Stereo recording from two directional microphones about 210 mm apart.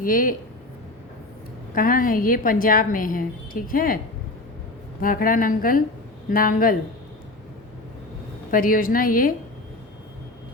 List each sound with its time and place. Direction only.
0.0 s a woman's voice: 40° left (ahead or behind)
1.7 s a woman's voice: 40° left (ahead or behind)
8.4 s a woman's voice: 40° left (ahead or behind)